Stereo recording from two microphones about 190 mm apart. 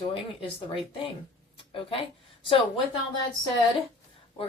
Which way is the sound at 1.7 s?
30° left (ahead or behind).